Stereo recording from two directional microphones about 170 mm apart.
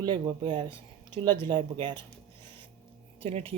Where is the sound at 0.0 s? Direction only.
30° right (ahead or behind).